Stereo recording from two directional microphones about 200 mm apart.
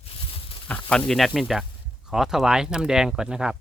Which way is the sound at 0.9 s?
Centre (ahead or behind).